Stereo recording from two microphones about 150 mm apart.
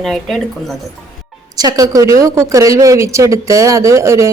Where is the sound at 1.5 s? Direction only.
25° right (ahead or behind).